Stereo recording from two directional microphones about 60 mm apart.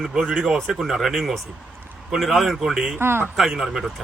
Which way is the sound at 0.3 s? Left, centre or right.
Centre.